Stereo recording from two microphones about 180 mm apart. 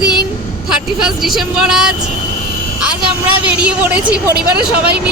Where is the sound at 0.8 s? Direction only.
5° right (ahead or behind).